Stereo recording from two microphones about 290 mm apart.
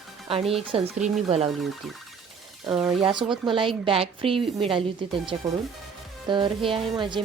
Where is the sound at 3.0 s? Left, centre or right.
Centre.